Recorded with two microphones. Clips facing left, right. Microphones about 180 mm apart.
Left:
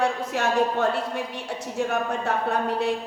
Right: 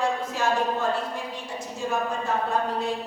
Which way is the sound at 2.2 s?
70° left (ahead or behind).